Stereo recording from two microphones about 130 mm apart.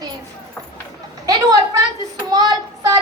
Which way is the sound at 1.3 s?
30° right (ahead or behind).